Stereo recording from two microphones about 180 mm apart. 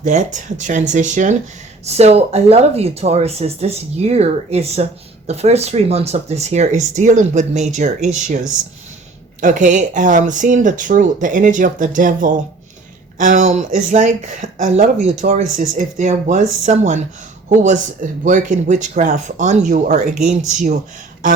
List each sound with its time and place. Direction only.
0.0 s speech: 45° right (ahead or behind)
9.4 s speech: 45° right (ahead or behind)